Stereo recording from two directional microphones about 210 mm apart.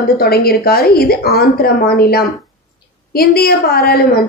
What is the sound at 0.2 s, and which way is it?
A woman's voice, 45° left (ahead or behind).